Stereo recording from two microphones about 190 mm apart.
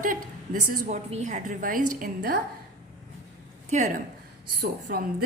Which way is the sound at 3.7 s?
40° right (ahead or behind).